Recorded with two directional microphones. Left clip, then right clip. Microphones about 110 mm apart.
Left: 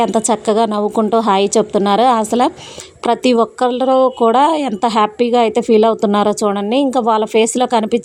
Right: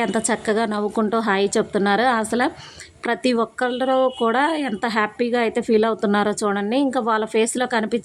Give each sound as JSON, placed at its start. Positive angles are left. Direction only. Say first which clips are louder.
{"t": 0.1, "sound": "a woman's voice", "louder": "left 7 dB", "side_deg": 40}